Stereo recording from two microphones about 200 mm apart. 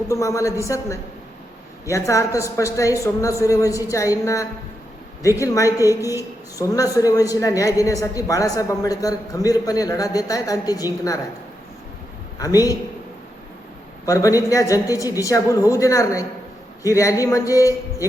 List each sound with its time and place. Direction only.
0.1 s a woman's voice: 15° left (ahead or behind)
12.4 s a woman's voice: 15° left (ahead or behind)
14.0 s a woman's voice: 15° left (ahead or behind)